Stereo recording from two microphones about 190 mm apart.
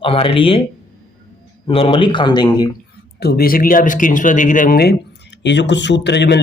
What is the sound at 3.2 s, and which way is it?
Speech, 55° left (ahead or behind).